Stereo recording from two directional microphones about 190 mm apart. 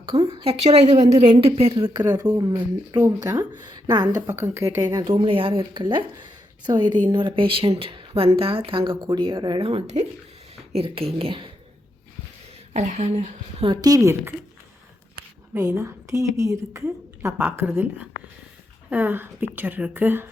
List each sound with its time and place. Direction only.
0.0 s a woman's voice: 30° right (ahead or behind)
12.7 s a woman's voice: 40° right (ahead or behind); by 14.3 s 15° right (ahead or behind)
15.5 s a woman's voice: 15° right (ahead or behind)